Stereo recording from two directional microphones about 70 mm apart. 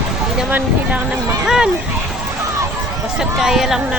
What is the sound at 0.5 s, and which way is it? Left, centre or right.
Speech, right.